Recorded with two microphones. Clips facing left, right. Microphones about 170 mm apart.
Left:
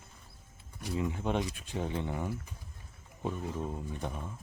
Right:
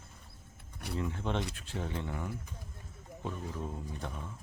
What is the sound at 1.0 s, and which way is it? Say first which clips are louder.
Speech: left 3 dB; 15° left (ahead or behind).